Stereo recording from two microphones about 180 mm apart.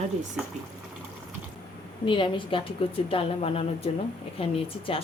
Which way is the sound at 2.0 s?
30° left (ahead or behind).